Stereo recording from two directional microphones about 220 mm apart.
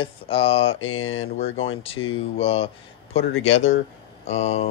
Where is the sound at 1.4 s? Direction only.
25° left (ahead or behind).